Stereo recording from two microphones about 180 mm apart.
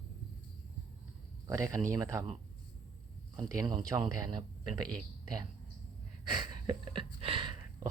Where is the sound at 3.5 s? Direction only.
20° right (ahead or behind).